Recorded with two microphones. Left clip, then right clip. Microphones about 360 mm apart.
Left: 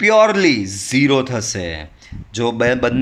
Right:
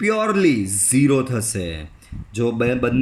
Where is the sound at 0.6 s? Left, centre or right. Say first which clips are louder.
Even; left.